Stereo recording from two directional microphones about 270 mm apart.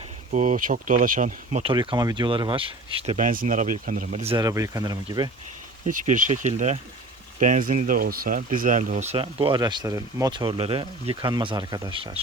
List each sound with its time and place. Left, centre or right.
0.3 s speech: right
5.9 s speech: right